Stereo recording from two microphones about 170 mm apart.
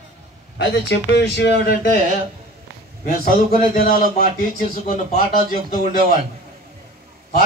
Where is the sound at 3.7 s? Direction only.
60° left (ahead or behind).